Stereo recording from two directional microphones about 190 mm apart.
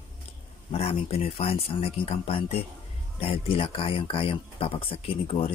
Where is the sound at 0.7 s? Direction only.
30° left (ahead or behind).